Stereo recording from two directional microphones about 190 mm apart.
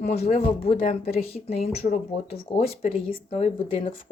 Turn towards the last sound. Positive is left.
turn(degrees=35)  # may be behind; listen again after turning